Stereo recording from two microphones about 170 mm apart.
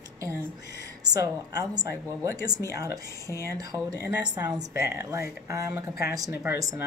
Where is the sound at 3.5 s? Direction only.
20° right (ahead or behind).